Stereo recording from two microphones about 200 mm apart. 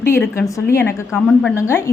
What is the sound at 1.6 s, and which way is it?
Speech, 15° left (ahead or behind).